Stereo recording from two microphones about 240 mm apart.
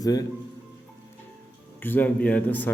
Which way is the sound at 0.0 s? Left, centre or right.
Centre.